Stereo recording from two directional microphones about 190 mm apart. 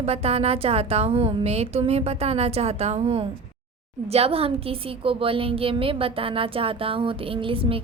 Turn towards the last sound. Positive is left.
turn(degrees=-30)  # may be behind; listen again after turning